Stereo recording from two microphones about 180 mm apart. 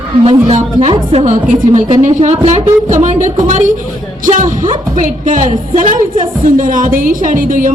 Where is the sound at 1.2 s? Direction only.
45° right (ahead or behind).